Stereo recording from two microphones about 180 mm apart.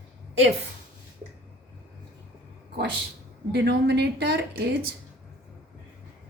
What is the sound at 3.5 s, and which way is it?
Speech, 70° right (ahead or behind).